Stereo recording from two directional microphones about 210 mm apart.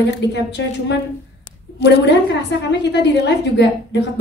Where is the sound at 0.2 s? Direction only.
55° left (ahead or behind).